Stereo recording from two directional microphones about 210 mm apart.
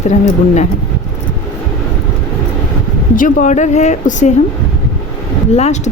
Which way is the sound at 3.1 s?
40° left (ahead or behind).